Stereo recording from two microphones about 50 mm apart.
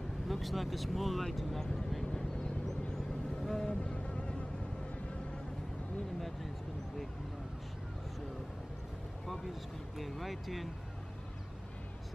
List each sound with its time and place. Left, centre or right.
0.3 s speech: centre
1.9 s vehicle: centre
3.4 s insect: centre
3.8 s insect: left
9.3 s speech: centre